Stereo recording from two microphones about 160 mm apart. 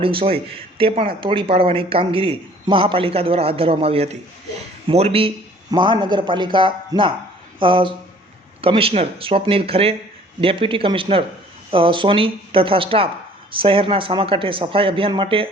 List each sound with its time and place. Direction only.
0.0 s a man's voice: 35° right (ahead or behind)